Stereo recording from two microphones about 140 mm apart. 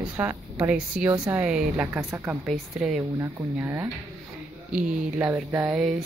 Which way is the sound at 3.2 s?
15° right (ahead or behind).